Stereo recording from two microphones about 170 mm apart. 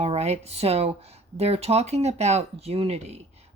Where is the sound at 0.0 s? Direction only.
40° right (ahead or behind).